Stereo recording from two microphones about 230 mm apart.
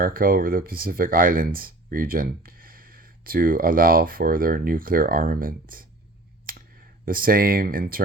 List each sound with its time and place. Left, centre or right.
0.0 s speech: right
7.0 s speech: right